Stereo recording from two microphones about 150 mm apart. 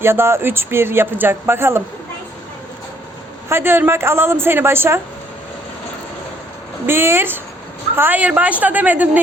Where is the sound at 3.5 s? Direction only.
15° right (ahead or behind).